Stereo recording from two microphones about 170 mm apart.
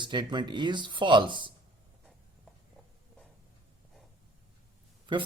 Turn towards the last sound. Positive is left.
turn(degrees=-30)  # may be behind; listen again after turning